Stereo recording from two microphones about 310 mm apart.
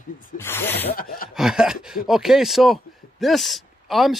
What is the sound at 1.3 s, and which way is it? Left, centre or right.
Speech, centre.